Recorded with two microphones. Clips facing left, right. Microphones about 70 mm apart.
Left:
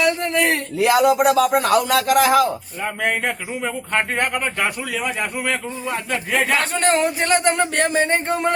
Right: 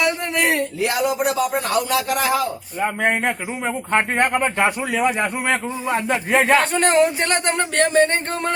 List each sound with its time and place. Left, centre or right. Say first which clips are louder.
0.0 s a sound: left 2 dB; centre
0.8 s a man's voice: left 5 dB; left
3.0 s speech: even; right
6.5 s speech: right 2 dB; centre